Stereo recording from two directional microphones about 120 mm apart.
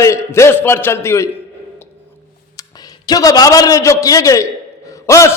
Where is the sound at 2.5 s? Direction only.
30° left (ahead or behind).